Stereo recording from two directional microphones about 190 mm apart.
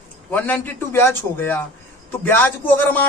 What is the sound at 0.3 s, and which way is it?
Speech, 10° left (ahead or behind).